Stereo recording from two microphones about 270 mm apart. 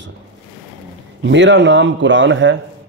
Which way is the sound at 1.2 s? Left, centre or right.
Right.